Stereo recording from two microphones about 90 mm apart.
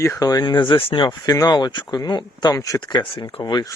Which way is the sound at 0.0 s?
40° left (ahead or behind).